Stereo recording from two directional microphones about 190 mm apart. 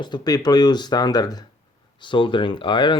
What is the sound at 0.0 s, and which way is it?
Speech, 20° left (ahead or behind).